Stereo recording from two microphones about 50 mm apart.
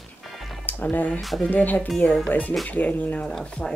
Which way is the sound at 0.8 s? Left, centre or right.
Left.